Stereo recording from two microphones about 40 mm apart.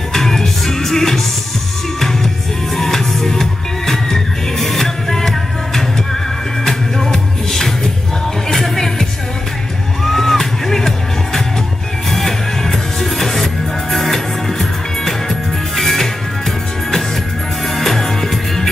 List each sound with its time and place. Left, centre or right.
0.1 s music: centre
2.7 s music: centre
6.6 s music: centre
10.0 s music: centre
12.1 s music: centre
17.7 s music: centre